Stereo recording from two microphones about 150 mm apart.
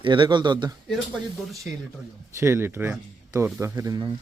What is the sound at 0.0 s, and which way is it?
Speech, 30° right (ahead or behind).